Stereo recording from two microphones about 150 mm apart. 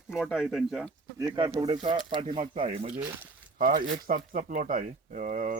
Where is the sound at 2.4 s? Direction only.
60° right (ahead or behind).